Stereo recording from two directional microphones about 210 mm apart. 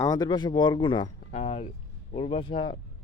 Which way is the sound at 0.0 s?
20° left (ahead or behind).